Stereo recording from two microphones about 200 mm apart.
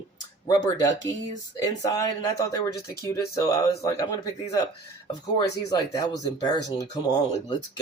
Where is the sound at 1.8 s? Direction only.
15° left (ahead or behind).